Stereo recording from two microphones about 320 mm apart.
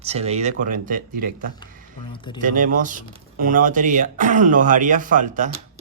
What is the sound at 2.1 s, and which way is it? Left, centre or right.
Speech, centre.